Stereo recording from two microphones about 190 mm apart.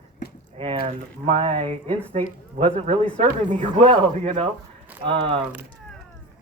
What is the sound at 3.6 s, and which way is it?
Speech, 30° right (ahead or behind).